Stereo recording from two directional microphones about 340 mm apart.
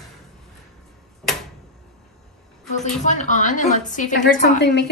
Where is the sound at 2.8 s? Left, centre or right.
Left.